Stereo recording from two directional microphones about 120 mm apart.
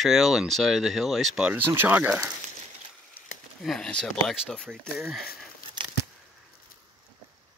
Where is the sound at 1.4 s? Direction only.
15° right (ahead or behind).